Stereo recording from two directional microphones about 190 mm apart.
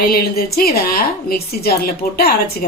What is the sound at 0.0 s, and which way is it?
A woman's voice, 50° left (ahead or behind).